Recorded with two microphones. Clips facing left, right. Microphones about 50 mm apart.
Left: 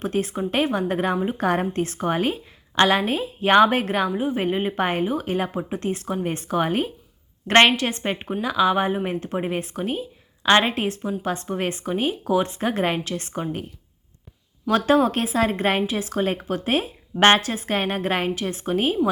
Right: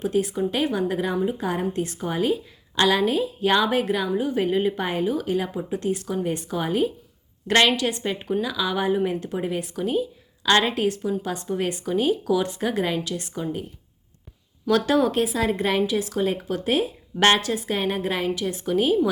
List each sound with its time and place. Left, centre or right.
0.0 s a woman's voice: left
4.2 s a woman's voice: left
14.7 s a woman's voice: left